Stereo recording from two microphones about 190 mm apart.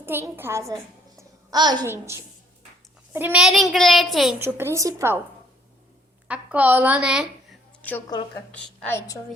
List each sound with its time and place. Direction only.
0.0 s a woman's voice: 10° right (ahead or behind)
4.4 s a woman's voice: 15° right (ahead or behind)
6.2 s a woman's voice: 5° right (ahead or behind)
7.8 s a sound: 10° left (ahead or behind)
8.8 s a woman's voice: 15° left (ahead or behind)